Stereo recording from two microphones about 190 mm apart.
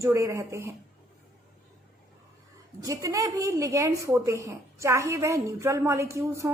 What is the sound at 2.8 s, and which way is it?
A woman's voice, 15° right (ahead or behind).